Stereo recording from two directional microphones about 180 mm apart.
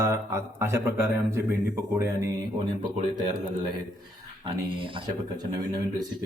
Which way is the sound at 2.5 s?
25° right (ahead or behind).